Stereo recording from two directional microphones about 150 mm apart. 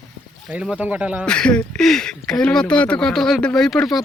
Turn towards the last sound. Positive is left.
turn(degrees=0)  # may be behind; listen again after turning